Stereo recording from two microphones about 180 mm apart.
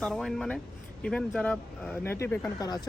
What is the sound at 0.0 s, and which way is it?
Speech, centre (ahead or behind).